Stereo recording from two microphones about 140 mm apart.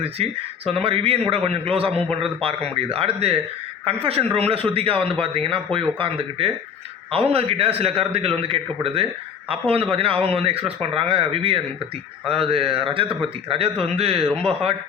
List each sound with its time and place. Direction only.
0.0 s a man's voice: 45° right (ahead or behind)